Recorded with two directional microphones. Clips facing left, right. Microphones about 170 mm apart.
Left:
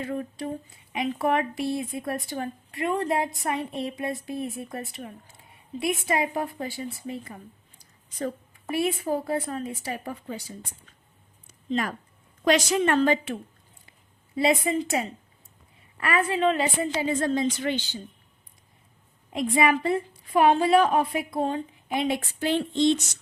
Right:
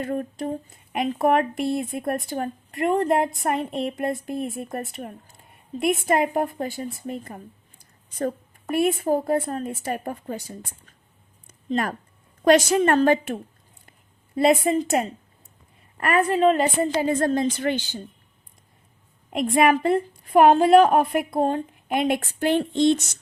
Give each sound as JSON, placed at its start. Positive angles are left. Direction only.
{"t": 0.0, "sound": "speech", "side_deg": -50}
{"t": 8.7, "sound": "speech", "side_deg": -50}
{"t": 11.7, "sound": "speech", "side_deg": -50}
{"t": 19.3, "sound": "speech", "side_deg": -60}